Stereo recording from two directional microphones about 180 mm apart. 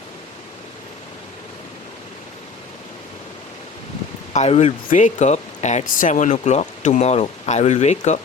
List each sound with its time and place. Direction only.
4.4 s speech: 35° left (ahead or behind)